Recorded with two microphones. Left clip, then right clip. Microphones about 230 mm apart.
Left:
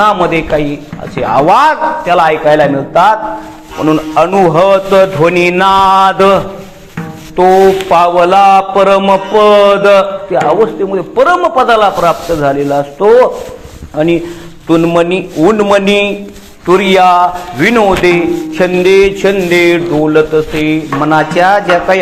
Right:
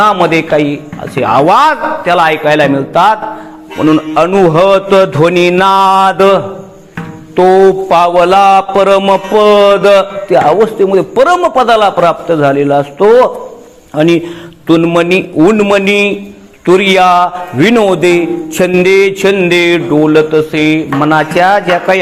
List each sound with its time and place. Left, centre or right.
0.0 s a man's voice: right